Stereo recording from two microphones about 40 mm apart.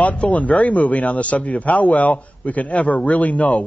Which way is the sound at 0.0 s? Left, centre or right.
Left.